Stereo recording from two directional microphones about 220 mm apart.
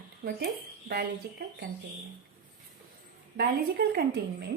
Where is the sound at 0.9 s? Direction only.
45° right (ahead or behind).